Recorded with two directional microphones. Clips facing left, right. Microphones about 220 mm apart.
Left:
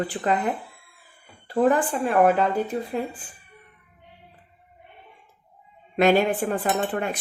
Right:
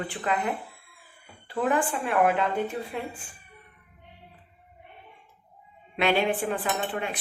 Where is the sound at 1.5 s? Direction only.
40° left (ahead or behind).